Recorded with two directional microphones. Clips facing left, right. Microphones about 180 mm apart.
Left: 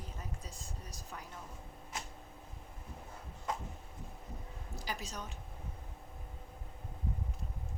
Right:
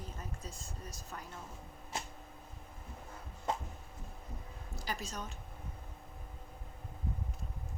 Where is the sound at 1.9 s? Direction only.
30° right (ahead or behind).